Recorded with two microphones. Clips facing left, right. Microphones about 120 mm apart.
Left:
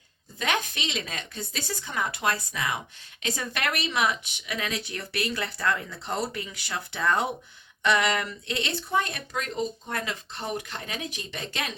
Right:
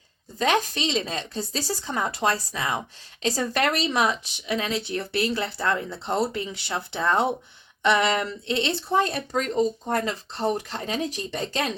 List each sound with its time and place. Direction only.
0.3 s speech: 35° right (ahead or behind)